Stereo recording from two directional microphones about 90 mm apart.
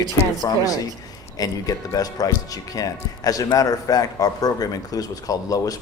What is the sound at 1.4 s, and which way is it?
Speech, 40° left (ahead or behind).